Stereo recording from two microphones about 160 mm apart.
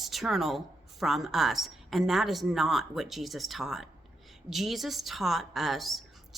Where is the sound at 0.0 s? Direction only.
Centre (ahead or behind).